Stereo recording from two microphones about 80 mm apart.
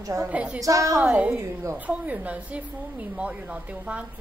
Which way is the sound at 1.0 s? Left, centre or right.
Centre.